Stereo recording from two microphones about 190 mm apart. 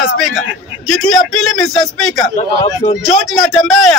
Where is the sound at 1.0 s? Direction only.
5° left (ahead or behind).